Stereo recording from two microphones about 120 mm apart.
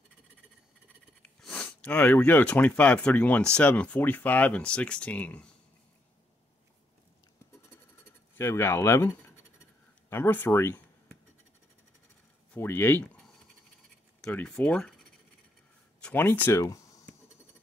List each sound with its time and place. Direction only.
1.2 s speech: 10° left (ahead or behind)
8.4 s speech: 20° left (ahead or behind)
12.5 s speech: 20° left (ahead or behind)
14.2 s speech: 10° left (ahead or behind)
16.0 s speech: 15° left (ahead or behind)